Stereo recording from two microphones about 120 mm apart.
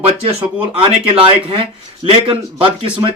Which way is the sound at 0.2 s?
55° right (ahead or behind).